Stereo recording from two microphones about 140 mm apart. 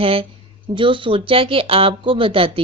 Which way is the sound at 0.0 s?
40° right (ahead or behind).